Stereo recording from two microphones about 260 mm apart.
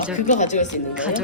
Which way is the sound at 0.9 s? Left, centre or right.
Centre.